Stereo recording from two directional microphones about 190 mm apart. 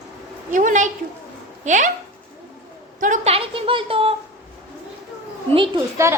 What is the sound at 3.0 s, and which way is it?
A woman's voice, 40° right (ahead or behind).